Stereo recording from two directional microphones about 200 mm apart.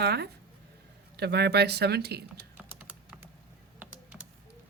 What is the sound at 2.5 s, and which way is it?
Typing, 5° right (ahead or behind).